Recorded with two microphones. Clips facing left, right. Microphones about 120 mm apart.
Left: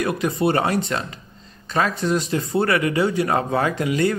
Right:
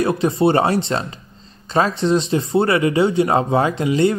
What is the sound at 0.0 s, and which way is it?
A man's voice, 30° right (ahead or behind).